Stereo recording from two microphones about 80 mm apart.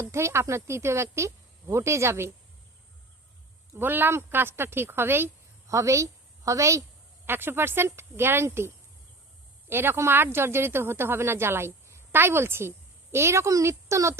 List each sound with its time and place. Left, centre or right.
0.0 s speech: right
3.8 s speech: right
5.7 s a woman's voice: right
7.3 s speech: right